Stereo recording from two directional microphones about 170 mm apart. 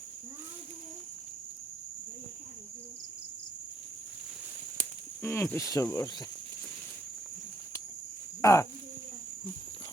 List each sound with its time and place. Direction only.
5.2 s speech: 15° left (ahead or behind)
8.4 s speech: 20° left (ahead or behind)